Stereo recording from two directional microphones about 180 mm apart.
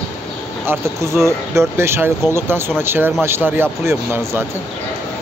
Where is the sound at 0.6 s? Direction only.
15° right (ahead or behind).